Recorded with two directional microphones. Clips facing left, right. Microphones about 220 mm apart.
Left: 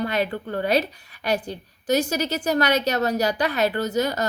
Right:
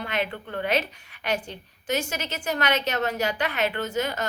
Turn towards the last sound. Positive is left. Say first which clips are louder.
# left 4 dB
turn(degrees=40)  # may be behind; listen again after turning